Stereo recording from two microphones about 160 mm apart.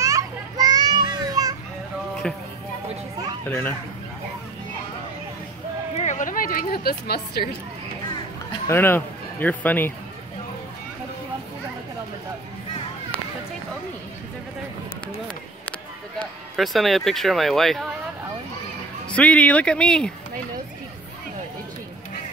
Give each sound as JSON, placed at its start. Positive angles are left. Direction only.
{"t": 0.0, "sound": "children playing", "side_deg": -20}
{"t": 2.2, "sound": "speech", "side_deg": 5}
{"t": 3.4, "sound": "speech", "side_deg": 10}
{"t": 5.9, "sound": "a woman's voice", "side_deg": 50}
{"t": 8.6, "sound": "speech", "side_deg": 15}
{"t": 16.2, "sound": "speech", "side_deg": 0}
{"t": 19.0, "sound": "speech", "side_deg": 5}